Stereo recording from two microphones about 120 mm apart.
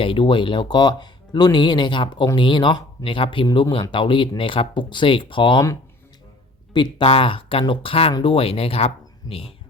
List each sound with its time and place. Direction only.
0.0 s speech: 45° left (ahead or behind)
6.7 s speech: 45° left (ahead or behind)